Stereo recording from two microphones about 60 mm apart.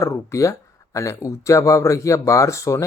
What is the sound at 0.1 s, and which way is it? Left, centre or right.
Speech, left.